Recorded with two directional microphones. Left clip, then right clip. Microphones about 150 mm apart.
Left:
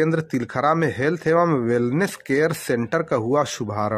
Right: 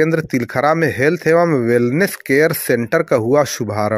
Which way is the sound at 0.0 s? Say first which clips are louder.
Right 6 dB; 20° right (ahead or behind).